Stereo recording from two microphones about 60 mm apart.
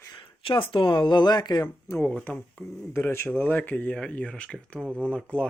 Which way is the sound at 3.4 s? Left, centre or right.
Left.